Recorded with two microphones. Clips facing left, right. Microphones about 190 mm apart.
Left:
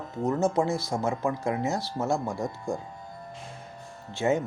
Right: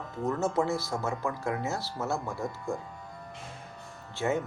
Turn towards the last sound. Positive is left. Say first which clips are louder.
# left 4 dB
turn(degrees=20)  # may be behind; listen again after turning